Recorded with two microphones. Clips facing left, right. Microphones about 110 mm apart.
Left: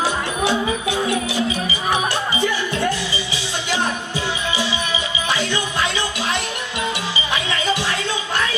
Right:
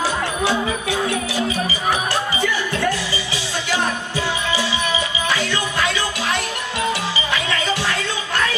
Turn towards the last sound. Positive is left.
turn(degrees=20)  # may be behind; listen again after turning